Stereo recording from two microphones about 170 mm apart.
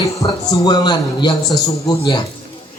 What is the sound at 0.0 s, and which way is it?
A man's voice, 20° left (ahead or behind).